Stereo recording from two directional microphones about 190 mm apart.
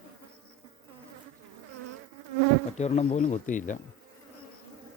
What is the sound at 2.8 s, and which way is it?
Speech, 35° left (ahead or behind).